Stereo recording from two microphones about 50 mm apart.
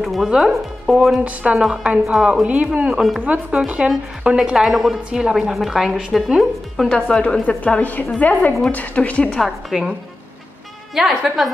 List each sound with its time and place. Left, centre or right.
0.0 s speech: centre
1.2 s speech: right
2.0 s a woman's voice: centre
2.4 s speech: right
2.9 s a woman's voice: centre
3.2 s speech: right
4.6 s a woman's voice: centre
5.1 s a woman's voice: centre
7.1 s a woman's voice: centre
7.4 s a woman's voice: left
9.7 s a woman's voice: centre
11.0 s a woman's voice: centre